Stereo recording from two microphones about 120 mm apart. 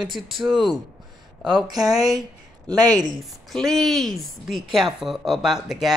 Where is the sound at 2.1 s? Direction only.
35° right (ahead or behind).